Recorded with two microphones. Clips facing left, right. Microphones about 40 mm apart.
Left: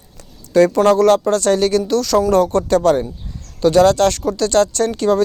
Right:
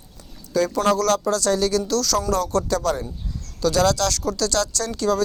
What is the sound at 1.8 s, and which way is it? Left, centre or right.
Speech, left.